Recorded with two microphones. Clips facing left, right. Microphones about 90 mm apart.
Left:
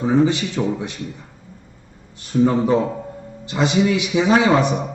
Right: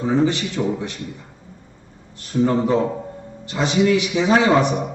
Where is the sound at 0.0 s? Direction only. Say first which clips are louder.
Left 2 dB; 15° left (ahead or behind).